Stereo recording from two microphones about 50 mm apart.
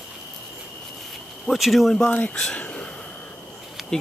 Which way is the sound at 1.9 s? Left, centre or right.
Left.